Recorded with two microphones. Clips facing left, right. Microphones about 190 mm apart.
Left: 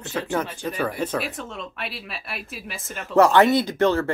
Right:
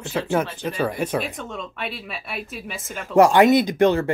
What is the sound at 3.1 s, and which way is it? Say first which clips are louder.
Speech: right 2 dB; 15° right (ahead or behind).